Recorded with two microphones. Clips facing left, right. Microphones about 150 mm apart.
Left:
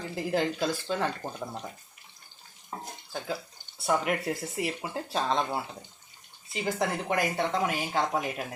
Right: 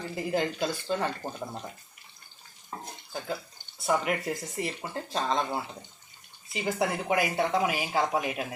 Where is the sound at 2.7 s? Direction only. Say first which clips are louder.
Left 1 dB; 15° left (ahead or behind).